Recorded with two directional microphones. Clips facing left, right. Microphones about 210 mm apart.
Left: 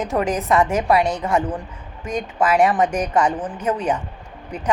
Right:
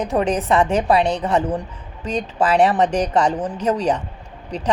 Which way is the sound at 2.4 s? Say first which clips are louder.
Right 1 dB; 35° right (ahead or behind).